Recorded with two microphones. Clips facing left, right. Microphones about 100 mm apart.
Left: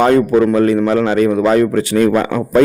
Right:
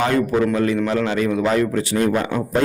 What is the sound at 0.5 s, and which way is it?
A man's voice, 45° left (ahead or behind).